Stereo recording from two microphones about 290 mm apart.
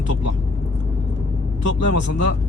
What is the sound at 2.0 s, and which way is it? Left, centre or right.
Speech, left.